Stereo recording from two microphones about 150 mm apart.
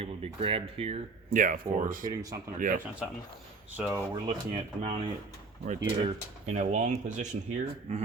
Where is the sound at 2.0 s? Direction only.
25° right (ahead or behind).